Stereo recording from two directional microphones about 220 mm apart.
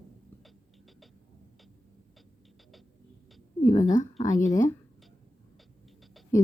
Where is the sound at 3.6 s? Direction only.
15° left (ahead or behind).